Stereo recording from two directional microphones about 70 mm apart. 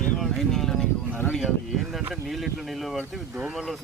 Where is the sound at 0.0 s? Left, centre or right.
Centre.